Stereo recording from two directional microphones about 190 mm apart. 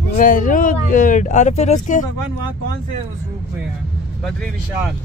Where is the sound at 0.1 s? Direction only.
45° left (ahead or behind).